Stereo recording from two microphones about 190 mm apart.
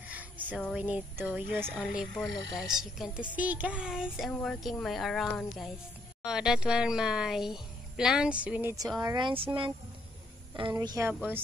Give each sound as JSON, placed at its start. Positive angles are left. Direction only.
{"t": 0.1, "sound": "music", "side_deg": -10}
{"t": 0.6, "sound": "speech", "side_deg": -5}
{"t": 10.8, "sound": "a woman's voice", "side_deg": -20}